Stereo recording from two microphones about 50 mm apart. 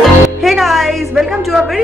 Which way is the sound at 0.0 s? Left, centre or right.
Centre.